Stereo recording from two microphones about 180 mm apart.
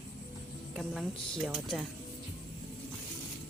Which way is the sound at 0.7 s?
Centre (ahead or behind).